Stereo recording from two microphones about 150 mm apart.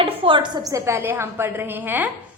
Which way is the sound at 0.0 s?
35° right (ahead or behind).